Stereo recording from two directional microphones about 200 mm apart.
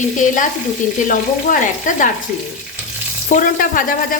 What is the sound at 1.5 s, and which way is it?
Speech, 40° left (ahead or behind).